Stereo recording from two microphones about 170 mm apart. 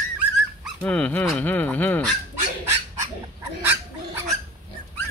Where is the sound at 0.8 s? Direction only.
10° left (ahead or behind).